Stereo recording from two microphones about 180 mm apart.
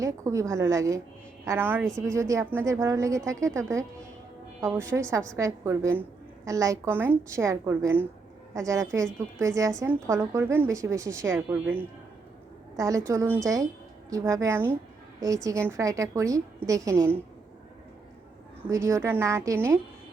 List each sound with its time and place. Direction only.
0.0 s a woman's voice: 15° right (ahead or behind)
18.7 s a woman's voice: 15° right (ahead or behind)